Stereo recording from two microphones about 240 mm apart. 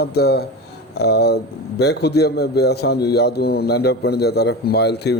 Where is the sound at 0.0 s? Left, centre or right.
Left.